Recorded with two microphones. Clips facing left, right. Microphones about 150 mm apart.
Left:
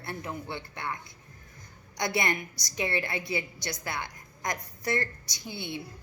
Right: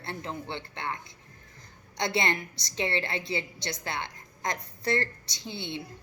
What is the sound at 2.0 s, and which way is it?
A woman's voice, 25° right (ahead or behind).